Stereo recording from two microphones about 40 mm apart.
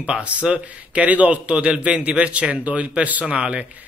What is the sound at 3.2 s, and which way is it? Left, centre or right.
Speech, right.